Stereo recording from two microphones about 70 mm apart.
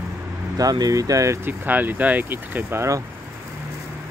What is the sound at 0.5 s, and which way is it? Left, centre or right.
Speech, right.